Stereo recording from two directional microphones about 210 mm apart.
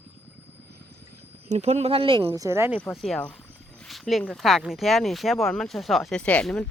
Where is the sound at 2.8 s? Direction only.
Centre (ahead or behind).